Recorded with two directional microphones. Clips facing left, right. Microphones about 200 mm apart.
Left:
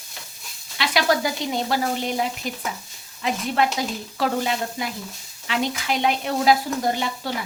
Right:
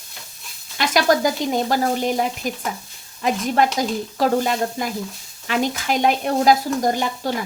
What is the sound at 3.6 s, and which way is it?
Speech, 45° right (ahead or behind).